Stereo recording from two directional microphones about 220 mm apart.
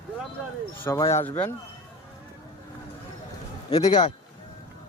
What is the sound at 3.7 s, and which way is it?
Speech, 20° left (ahead or behind).